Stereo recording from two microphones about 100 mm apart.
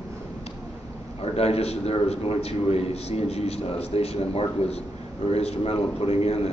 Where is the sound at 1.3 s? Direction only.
90° left.